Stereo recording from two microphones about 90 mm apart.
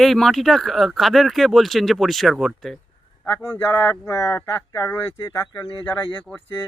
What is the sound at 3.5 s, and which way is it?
Speech, 25° left (ahead or behind).